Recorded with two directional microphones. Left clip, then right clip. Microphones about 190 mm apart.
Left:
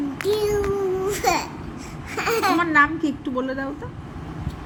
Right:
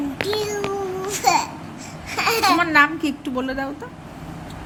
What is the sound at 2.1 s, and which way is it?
Laughter, 5° right (ahead or behind).